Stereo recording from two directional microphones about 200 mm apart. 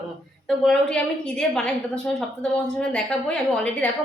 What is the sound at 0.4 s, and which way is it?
A woman's voice, 5° left (ahead or behind).